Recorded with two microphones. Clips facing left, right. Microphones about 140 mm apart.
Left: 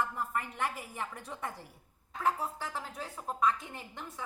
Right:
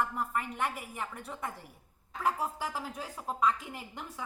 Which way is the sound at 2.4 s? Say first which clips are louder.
Right 3 dB; 10° right (ahead or behind).